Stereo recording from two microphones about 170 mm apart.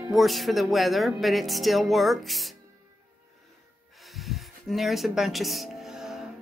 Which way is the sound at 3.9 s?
Centre (ahead or behind).